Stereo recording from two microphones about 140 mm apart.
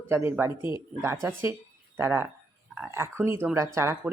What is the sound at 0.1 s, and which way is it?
Speech, 20° right (ahead or behind).